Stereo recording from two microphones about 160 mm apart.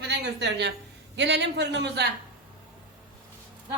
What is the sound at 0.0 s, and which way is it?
A woman's voice, 90° right.